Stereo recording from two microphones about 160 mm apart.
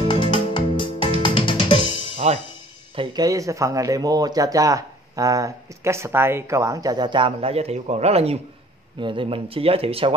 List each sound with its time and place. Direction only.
0.1 s music: 30° left (ahead or behind)
3.0 s speech: 25° right (ahead or behind)